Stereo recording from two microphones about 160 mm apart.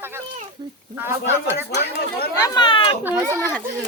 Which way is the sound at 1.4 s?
15° right (ahead or behind).